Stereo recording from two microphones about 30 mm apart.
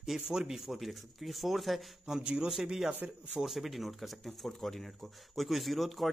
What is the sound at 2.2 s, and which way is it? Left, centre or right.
Speech, right.